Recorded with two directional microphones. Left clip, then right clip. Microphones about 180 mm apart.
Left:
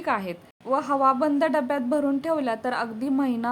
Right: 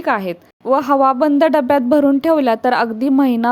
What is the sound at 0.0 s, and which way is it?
A woman's voice, 35° right (ahead or behind).